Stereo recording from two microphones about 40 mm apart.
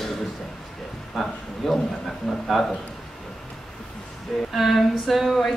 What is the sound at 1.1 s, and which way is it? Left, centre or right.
Speech, centre.